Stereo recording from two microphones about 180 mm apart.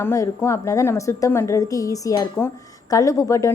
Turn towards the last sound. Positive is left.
turn(degrees=15)  # may be behind; listen again after turning